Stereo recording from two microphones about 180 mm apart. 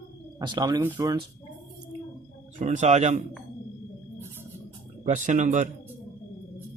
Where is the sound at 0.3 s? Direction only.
20° right (ahead or behind).